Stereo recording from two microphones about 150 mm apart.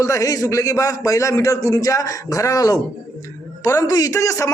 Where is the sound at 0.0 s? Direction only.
20° left (ahead or behind).